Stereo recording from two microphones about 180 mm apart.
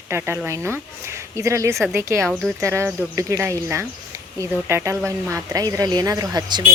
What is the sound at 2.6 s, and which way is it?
A woman's voice, 15° right (ahead or behind).